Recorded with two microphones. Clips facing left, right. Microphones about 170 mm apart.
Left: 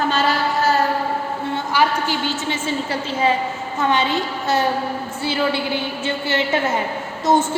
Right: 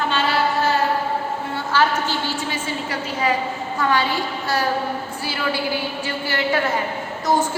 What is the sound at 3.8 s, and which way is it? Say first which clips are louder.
A woman's voice: left 2 dB; 20° left (ahead or behind).